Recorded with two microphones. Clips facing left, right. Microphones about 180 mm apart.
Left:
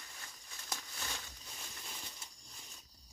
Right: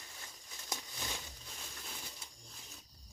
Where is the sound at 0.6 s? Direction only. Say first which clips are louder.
Right 2 dB; 20° right (ahead or behind).